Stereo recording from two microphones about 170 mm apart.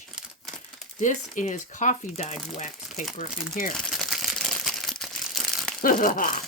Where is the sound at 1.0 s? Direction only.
45° left (ahead or behind).